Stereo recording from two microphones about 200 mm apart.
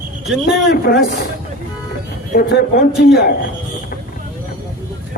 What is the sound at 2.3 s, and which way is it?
Speech, 50° left (ahead or behind).